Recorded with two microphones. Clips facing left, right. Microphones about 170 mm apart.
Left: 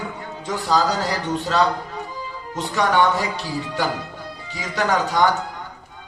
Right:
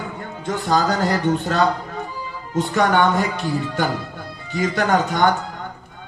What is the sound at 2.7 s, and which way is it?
A man's voice, 55° right (ahead or behind).